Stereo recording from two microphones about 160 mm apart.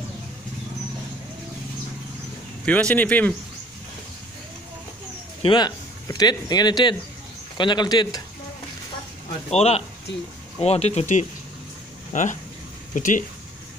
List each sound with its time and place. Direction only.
2.6 s speech: 10° left (ahead or behind)
5.4 s speech: 30° left (ahead or behind)
9.5 s speech: 40° left (ahead or behind)